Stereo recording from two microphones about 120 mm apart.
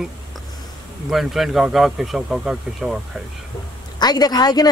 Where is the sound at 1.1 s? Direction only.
Centre (ahead or behind).